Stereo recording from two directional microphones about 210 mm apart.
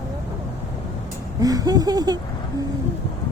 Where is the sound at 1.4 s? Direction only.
15° right (ahead or behind).